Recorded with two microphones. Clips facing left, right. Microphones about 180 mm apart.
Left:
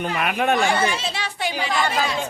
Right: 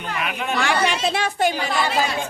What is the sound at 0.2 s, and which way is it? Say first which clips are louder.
Speech: left 5 dB; 55° left (ahead or behind).